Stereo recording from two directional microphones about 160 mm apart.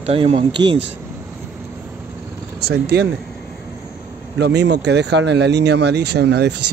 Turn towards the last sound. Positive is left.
turn(degrees=-90)